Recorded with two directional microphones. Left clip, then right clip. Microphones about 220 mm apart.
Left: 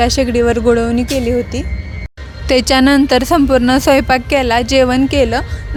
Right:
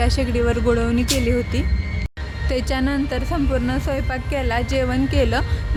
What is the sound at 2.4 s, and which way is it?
A woman's voice, 45° left (ahead or behind).